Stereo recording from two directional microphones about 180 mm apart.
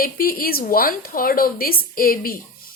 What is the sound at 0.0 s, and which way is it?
A woman's voice, 55° left (ahead or behind).